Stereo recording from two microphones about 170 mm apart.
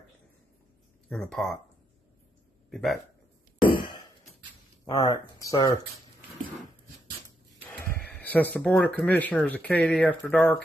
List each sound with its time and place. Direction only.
1.0 s speech: 5° left (ahead or behind)
2.7 s speech: centre (ahead or behind)
3.6 s a sound: 30° left (ahead or behind)
4.8 s speech: 20° left (ahead or behind)
7.7 s speech: 10° left (ahead or behind)